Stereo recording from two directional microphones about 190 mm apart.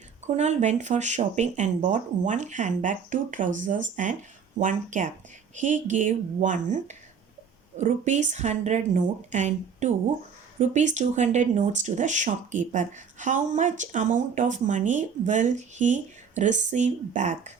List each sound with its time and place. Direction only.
0.3 s speech: 35° right (ahead or behind)